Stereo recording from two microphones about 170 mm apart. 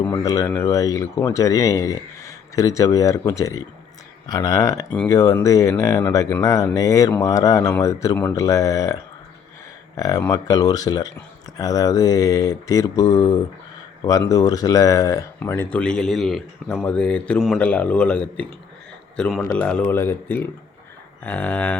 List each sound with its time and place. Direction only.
0.0 s speech: 20° left (ahead or behind)
10.0 s a man's voice: 20° left (ahead or behind)